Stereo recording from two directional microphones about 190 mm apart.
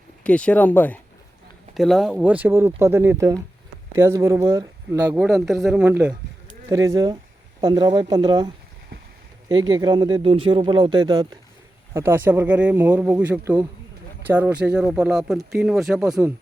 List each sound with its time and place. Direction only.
0.3 s speech: 5° left (ahead or behind)